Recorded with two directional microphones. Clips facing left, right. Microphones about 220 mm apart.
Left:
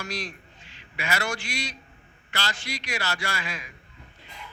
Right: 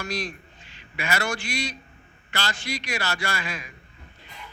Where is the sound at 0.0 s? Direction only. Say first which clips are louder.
Right 3 dB; 50° right (ahead or behind).